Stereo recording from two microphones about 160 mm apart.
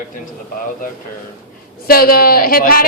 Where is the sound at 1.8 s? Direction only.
65° left (ahead or behind).